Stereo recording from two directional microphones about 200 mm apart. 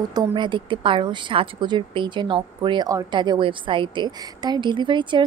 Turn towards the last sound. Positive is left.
turn(degrees=-25)  # may be behind; listen again after turning